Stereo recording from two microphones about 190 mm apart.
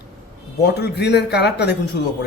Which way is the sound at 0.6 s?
60° left (ahead or behind).